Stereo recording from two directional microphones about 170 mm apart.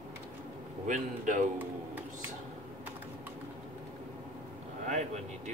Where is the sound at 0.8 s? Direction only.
50° right (ahead or behind).